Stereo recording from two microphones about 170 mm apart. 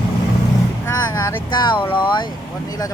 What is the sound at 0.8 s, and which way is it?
Speech, 15° left (ahead or behind).